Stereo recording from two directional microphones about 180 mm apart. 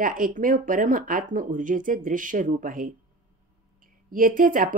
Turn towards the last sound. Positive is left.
turn(degrees=-50)  # may be behind; listen again after turning